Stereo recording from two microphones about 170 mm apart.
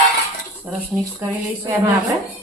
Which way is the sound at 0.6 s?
10° right (ahead or behind).